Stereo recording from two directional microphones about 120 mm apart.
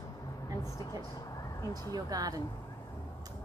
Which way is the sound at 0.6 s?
25° left (ahead or behind).